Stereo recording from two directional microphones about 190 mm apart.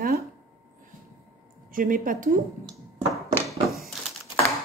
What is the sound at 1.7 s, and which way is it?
Speech, 45° right (ahead or behind).